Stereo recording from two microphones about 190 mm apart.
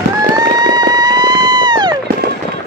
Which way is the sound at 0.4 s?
20° right (ahead or behind).